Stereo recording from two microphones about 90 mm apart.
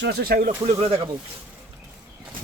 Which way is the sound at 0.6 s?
90° right.